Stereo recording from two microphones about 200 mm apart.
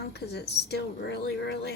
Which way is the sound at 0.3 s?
55° left (ahead or behind).